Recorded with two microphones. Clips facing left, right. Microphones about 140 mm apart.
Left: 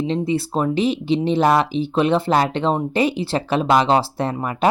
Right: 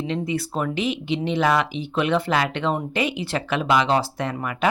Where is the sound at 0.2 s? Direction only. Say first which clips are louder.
Left 5 dB; 30° left (ahead or behind).